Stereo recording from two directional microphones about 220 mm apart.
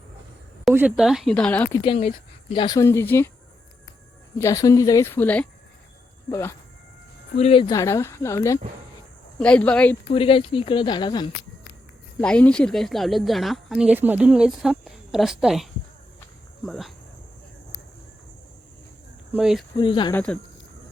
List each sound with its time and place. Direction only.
0.6 s speech: 5° right (ahead or behind)
1.8 s speech: 25° left (ahead or behind); by 3.2 s 10° left (ahead or behind)
4.4 s speech: 15° left (ahead or behind)
7.3 s speech: 25° left (ahead or behind); by 10.0 s 5° left (ahead or behind)
10.1 s speech: 25° left (ahead or behind)
12.2 s speech: 5° left (ahead or behind)
19.3 s speech: 5° right (ahead or behind)
19.7 s speech: 20° left (ahead or behind)
20.1 s speech: 5° left (ahead or behind)